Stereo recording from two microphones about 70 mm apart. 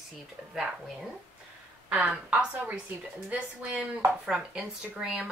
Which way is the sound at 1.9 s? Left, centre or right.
Centre.